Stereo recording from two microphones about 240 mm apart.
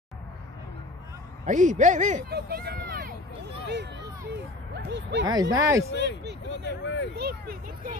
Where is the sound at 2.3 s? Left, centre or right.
Right.